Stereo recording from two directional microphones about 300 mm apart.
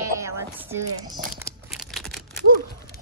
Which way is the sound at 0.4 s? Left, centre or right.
Centre.